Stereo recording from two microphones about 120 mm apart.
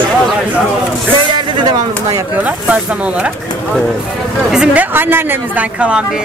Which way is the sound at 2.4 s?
10° right (ahead or behind).